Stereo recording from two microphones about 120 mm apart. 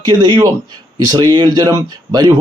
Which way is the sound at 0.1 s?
40° right (ahead or behind).